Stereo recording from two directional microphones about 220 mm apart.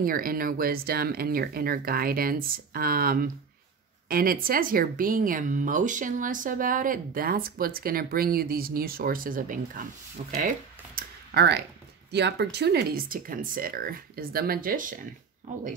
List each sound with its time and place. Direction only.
0.0 s a woman's voice: 40° right (ahead or behind)
11.0 s a sound: 50° right (ahead or behind)
12.1 s a woman's voice: 50° right (ahead or behind)